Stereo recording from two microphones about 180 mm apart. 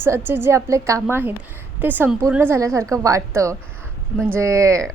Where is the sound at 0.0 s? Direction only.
10° right (ahead or behind).